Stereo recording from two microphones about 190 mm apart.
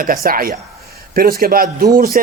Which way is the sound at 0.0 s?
50° right (ahead or behind).